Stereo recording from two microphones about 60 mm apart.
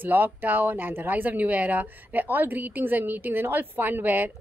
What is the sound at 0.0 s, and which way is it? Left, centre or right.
A woman's voice, right.